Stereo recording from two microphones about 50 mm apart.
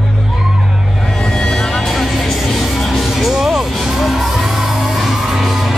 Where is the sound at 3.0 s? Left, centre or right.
Centre.